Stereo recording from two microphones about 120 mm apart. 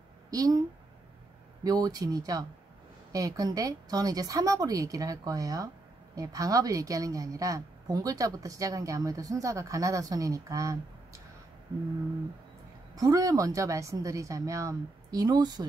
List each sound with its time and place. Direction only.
0.3 s speech: 30° right (ahead or behind)
1.6 s a woman's voice: 30° right (ahead or behind)
12.9 s a woman's voice: 30° right (ahead or behind)